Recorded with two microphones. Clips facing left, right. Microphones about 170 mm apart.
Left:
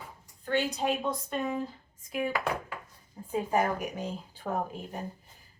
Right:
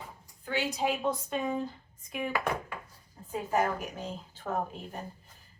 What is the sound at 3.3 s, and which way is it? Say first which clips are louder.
A woman's voice: left 2 dB; 15° left (ahead or behind).